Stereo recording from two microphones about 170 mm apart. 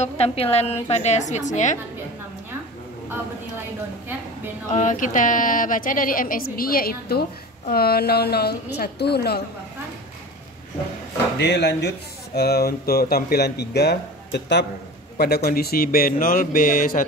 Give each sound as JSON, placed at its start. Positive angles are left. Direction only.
{"t": 0.0, "sound": "a woman's voice", "side_deg": 35}
{"t": 4.7, "sound": "a woman's voice", "side_deg": 50}
{"t": 11.3, "sound": "speech", "side_deg": 90}
{"t": 12.4, "sound": "speech", "side_deg": 65}
{"t": 15.1, "sound": "speech", "side_deg": 70}